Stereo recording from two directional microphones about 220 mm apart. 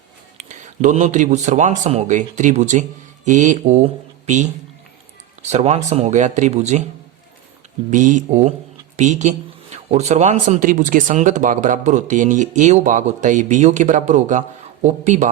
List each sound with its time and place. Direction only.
0.3 s speech: 35° right (ahead or behind)
7.9 s speech: 35° right (ahead or behind)